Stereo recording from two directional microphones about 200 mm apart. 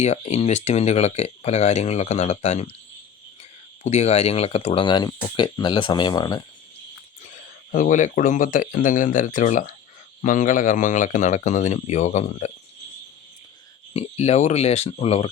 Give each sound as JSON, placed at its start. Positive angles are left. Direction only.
{"t": 0.0, "sound": "speech", "side_deg": 30}
{"t": 3.8, "sound": "speech", "side_deg": 35}
{"t": 7.7, "sound": "speech", "side_deg": 40}
{"t": 13.9, "sound": "speech", "side_deg": 30}